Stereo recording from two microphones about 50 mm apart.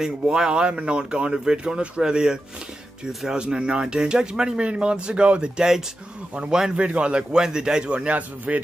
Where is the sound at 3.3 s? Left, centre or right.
Centre.